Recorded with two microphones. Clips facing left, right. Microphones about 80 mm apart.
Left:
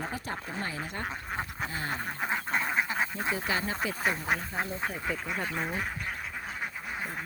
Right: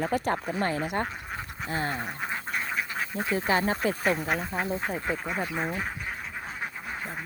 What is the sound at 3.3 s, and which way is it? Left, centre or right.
Speech, right.